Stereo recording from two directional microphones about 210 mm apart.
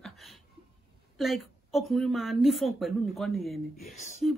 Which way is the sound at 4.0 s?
35° left (ahead or behind).